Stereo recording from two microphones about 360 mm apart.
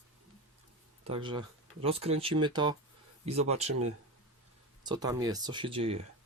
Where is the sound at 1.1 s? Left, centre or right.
Centre.